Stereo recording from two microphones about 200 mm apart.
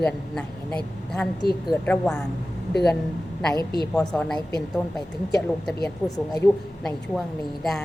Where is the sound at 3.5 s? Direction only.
25° right (ahead or behind).